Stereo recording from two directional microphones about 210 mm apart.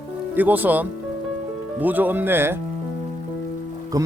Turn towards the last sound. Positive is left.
turn(degrees=-15)  # may be behind; listen again after turning